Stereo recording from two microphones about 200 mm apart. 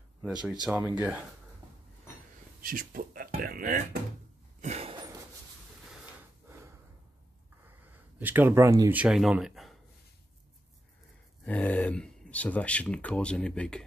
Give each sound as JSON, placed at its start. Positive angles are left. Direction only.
{"t": 0.2, "sound": "speech", "side_deg": -5}
{"t": 2.6, "sound": "speech", "side_deg": -45}
{"t": 4.6, "sound": "a sound", "side_deg": -35}
{"t": 8.2, "sound": "speech", "side_deg": -10}
{"t": 11.4, "sound": "speech", "side_deg": 5}